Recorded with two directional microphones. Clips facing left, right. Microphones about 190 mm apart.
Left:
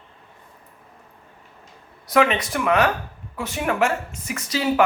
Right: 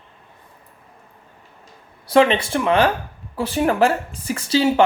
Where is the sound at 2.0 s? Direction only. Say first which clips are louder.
Right 4 dB; 30° right (ahead or behind).